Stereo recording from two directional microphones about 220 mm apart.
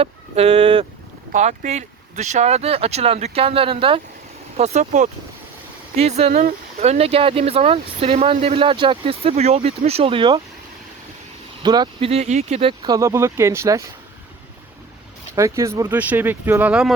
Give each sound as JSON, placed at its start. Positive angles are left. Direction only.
{"t": 0.0, "sound": "speech", "side_deg": -25}
{"t": 11.6, "sound": "speech", "side_deg": -20}
{"t": 15.4, "sound": "speech", "side_deg": -15}